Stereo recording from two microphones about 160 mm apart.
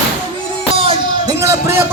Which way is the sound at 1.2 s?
20° right (ahead or behind).